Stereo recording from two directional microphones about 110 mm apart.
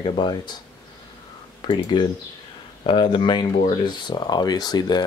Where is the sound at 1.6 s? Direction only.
45° left (ahead or behind).